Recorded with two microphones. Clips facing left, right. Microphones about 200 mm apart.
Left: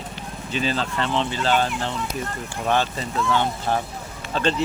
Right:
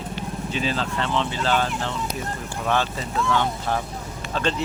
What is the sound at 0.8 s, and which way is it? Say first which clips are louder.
Speech: left 1 dB; 25° left (ahead or behind).